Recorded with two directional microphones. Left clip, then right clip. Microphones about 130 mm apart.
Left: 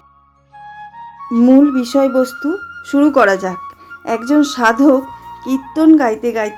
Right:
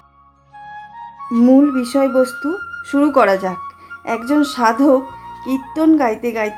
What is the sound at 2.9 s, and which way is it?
Speech, 30° left (ahead or behind).